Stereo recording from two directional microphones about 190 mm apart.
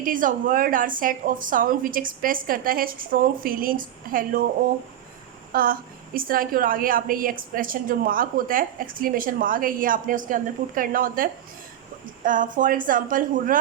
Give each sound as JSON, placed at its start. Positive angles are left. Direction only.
{"t": 0.0, "sound": "a woman's voice", "side_deg": -45}
{"t": 5.5, "sound": "a sound", "side_deg": -50}
{"t": 6.1, "sound": "a woman's voice", "side_deg": -50}